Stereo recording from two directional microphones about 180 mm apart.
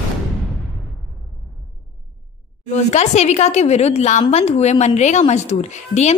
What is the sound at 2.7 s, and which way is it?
A woman's voice, 40° left (ahead or behind).